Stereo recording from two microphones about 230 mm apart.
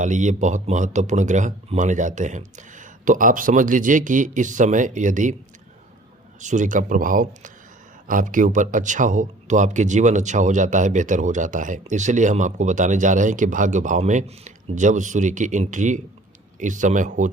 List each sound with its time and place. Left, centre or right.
0.0 s speech: right
6.4 s speech: right